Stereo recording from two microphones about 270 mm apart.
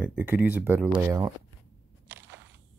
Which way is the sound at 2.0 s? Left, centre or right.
Centre.